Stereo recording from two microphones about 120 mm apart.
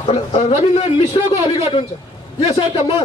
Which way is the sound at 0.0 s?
60° left (ahead or behind).